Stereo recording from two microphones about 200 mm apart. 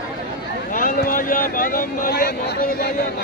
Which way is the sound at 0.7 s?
45° left (ahead or behind).